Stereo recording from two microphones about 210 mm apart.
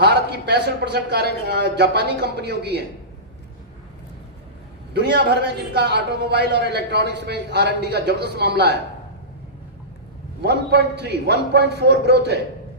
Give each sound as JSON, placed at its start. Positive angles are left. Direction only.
{"t": 0.0, "sound": "a man's voice", "side_deg": -55}
{"t": 4.9, "sound": "a man's voice", "side_deg": -55}
{"t": 10.4, "sound": "a man's voice", "side_deg": -50}